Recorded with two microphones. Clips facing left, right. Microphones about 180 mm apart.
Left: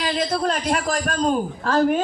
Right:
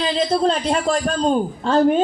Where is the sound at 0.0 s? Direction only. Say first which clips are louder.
Right 4 dB; 30° right (ahead or behind).